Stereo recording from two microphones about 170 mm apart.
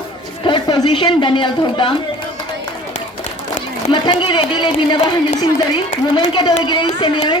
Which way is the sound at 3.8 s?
30° left (ahead or behind).